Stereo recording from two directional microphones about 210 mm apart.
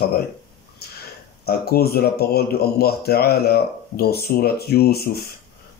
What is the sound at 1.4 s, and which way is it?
Speech, 50° left (ahead or behind).